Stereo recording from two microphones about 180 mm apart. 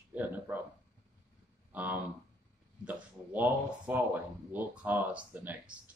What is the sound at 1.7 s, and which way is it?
Speech, 10° right (ahead or behind).